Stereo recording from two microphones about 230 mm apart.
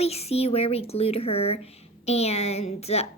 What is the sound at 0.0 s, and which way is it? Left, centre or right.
A child's voice, left.